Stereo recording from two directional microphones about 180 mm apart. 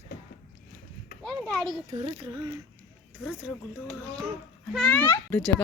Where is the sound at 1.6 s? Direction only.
30° right (ahead or behind).